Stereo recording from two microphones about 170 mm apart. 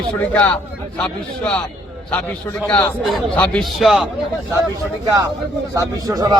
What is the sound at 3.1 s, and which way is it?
Speech, 5° left (ahead or behind).